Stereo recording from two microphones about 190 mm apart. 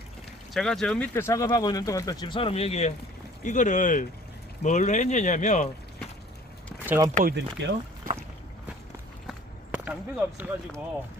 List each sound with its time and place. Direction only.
0.5 s speech: 5° left (ahead or behind); by 5.6 s 40° left (ahead or behind)
6.8 s speech: 10° right (ahead or behind)
7.3 s speech: 70° right (ahead or behind)
9.7 s speech: 5° right (ahead or behind)